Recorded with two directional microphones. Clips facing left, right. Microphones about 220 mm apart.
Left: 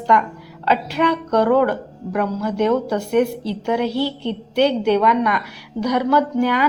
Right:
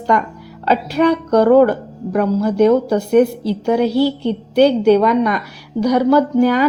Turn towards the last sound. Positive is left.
turn(degrees=-40)  # may be behind; listen again after turning